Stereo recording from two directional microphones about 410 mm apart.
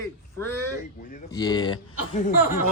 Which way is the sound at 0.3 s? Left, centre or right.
Centre.